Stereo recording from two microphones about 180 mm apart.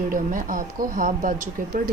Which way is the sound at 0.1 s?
50° right (ahead or behind).